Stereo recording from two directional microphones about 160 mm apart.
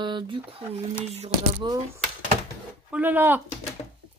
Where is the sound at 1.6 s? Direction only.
25° right (ahead or behind).